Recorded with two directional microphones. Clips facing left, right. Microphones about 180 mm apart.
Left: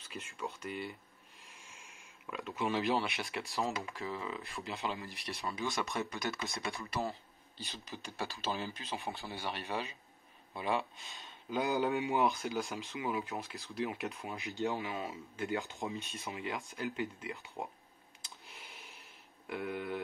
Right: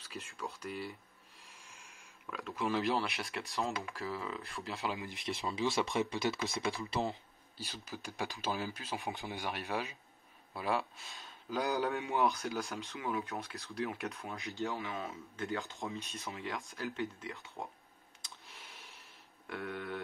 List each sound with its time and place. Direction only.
0.1 s speech: centre (ahead or behind)
5.0 s speech: 20° right (ahead or behind)
6.4 s speech: centre (ahead or behind)
6.8 s speech: 20° right (ahead or behind)
7.5 s speech: 5° right (ahead or behind)
14.5 s speech: 15° left (ahead or behind)
16.0 s speech: centre (ahead or behind)
18.5 s a sound: centre (ahead or behind)
19.4 s speech: 5° left (ahead or behind)